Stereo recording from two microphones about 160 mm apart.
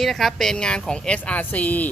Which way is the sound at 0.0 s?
Centre (ahead or behind).